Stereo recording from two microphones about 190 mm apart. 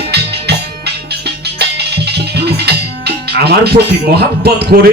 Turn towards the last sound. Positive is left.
turn(degrees=-50)  # may be behind; listen again after turning